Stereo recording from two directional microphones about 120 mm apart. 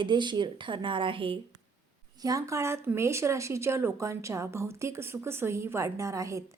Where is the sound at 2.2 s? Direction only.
25° right (ahead or behind).